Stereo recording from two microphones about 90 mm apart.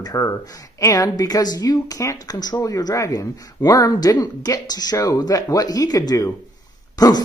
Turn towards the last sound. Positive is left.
turn(degrees=45)  # may be behind; listen again after turning